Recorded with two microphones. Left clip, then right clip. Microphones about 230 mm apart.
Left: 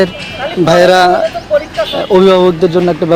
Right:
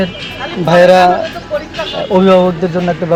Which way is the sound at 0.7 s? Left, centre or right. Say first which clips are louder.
Even; left.